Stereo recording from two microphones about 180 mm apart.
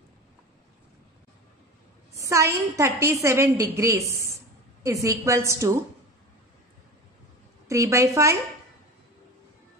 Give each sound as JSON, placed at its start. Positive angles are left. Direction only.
{"t": 2.1, "sound": "a woman's voice", "side_deg": -15}
{"t": 7.6, "sound": "a woman's voice", "side_deg": -15}